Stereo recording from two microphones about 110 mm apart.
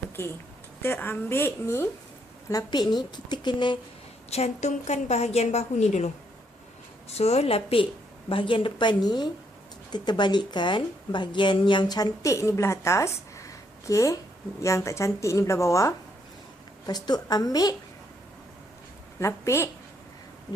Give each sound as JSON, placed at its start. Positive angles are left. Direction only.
{"t": 0.2, "sound": "a woman's voice", "side_deg": 20}
{"t": 2.5, "sound": "a woman's voice", "side_deg": 40}
{"t": 4.3, "sound": "a woman's voice", "side_deg": 85}
{"t": 7.1, "sound": "a woman's voice", "side_deg": 70}
{"t": 19.2, "sound": "a woman's voice", "side_deg": 25}